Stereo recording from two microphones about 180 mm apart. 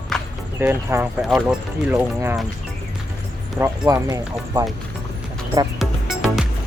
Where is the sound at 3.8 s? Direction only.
20° right (ahead or behind).